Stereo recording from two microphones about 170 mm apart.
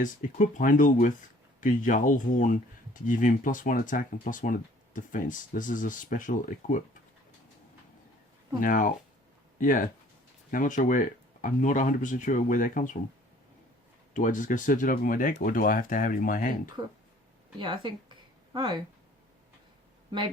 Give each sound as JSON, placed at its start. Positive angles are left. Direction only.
{"t": 0.0, "sound": "speech", "side_deg": 50}
{"t": 8.6, "sound": "speech", "side_deg": 50}
{"t": 14.1, "sound": "speech", "side_deg": 50}
{"t": 17.6, "sound": "speech", "side_deg": -30}